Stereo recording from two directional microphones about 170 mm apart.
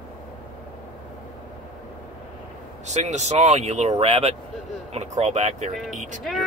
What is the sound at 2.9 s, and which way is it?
Speech, 40° right (ahead or behind).